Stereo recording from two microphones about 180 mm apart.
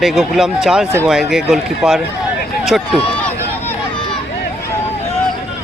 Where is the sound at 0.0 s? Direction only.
Centre (ahead or behind).